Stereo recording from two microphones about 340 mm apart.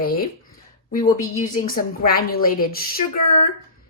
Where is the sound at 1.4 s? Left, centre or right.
Left.